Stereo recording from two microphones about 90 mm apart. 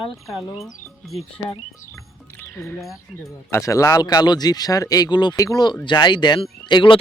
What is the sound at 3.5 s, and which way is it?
Speech, 35° left (ahead or behind).